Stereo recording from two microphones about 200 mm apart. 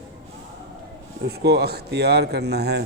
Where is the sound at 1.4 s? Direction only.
55° right (ahead or behind).